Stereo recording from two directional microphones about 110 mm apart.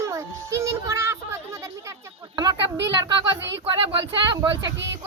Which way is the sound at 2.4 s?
40° right (ahead or behind).